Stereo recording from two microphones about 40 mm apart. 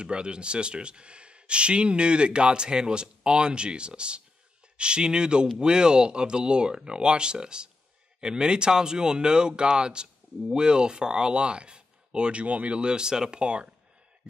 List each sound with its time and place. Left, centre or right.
0.0 s speech: right